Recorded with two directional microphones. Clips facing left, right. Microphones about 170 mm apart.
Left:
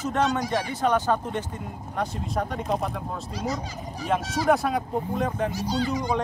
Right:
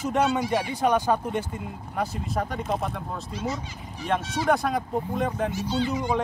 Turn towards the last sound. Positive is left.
turn(degrees=40)  # may be behind; listen again after turning